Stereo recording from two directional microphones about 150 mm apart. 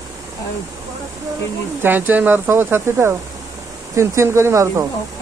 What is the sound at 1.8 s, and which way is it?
Speech, 10° right (ahead or behind).